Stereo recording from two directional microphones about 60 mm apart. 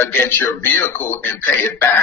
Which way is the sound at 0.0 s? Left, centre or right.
Left.